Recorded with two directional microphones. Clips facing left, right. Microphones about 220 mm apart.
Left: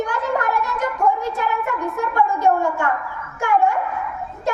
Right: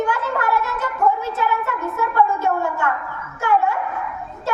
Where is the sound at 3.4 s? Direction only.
15° left (ahead or behind).